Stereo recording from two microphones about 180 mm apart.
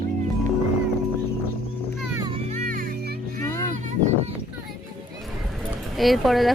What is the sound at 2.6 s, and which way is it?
Music, 50° right (ahead or behind).